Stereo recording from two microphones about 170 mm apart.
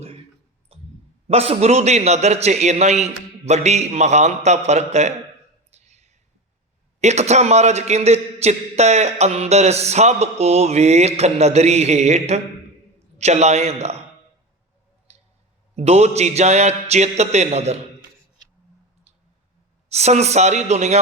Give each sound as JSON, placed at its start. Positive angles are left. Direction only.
{"t": 0.7, "sound": "clicking", "side_deg": -35}
{"t": 1.3, "sound": "a man's voice", "side_deg": -35}
{"t": 5.7, "sound": "whispering", "side_deg": -40}
{"t": 7.0, "sound": "a man's voice", "side_deg": -40}
{"t": 15.7, "sound": "a man's voice", "side_deg": -40}
{"t": 19.9, "sound": "a man's voice", "side_deg": -40}